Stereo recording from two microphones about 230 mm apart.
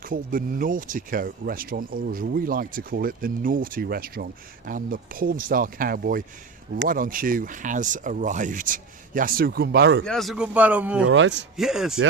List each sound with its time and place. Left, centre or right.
0.1 s speech: right
10.0 s a man's voice: centre
11.0 s a man's voice: right
11.5 s a man's voice: centre